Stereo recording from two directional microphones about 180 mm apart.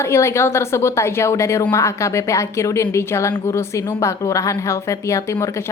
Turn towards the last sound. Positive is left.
turn(degrees=15)  # may be behind; listen again after turning